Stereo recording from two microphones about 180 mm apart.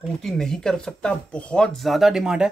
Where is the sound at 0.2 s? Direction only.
Centre (ahead or behind).